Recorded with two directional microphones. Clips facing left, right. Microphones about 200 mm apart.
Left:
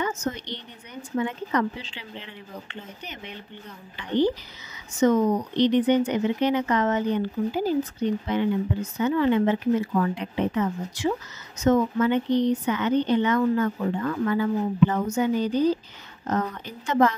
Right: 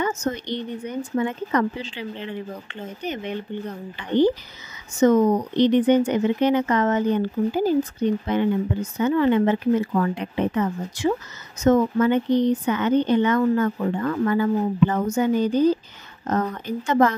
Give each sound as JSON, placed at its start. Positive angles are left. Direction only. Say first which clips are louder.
{"t": 0.0, "sound": "speech", "louder": "right 3 dB", "side_deg": -45}